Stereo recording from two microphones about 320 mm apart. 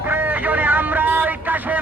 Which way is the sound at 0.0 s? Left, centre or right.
Centre.